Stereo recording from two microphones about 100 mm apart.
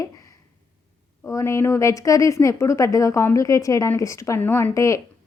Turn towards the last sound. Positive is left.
turn(degrees=30)  # may be behind; listen again after turning